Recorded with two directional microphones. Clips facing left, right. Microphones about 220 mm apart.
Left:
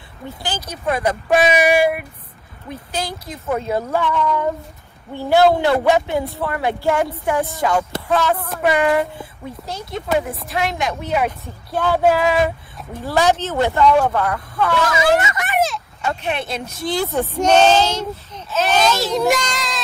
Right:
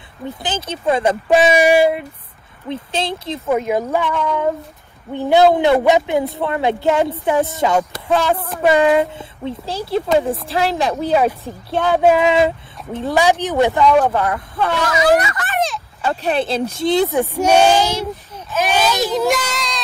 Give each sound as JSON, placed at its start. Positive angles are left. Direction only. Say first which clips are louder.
{"t": 0.4, "sound": "speech", "louder": "right 3 dB", "side_deg": -25}
{"t": 3.6, "sound": "speech", "louder": "right 2 dB", "side_deg": -15}
{"t": 15.1, "sound": "a sound", "louder": "even", "side_deg": 20}
{"t": 16.0, "sound": "speech", "louder": "right 5 dB", "side_deg": -35}
{"t": 19.2, "sound": "child singing", "louder": "even", "side_deg": 0}